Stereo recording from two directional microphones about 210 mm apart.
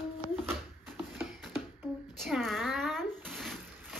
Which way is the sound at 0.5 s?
5° right (ahead or behind).